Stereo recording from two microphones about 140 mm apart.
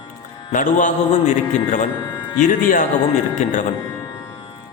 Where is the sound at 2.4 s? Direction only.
70° left (ahead or behind).